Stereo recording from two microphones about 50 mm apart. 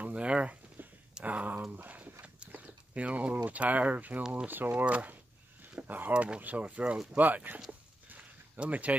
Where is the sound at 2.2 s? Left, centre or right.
Right.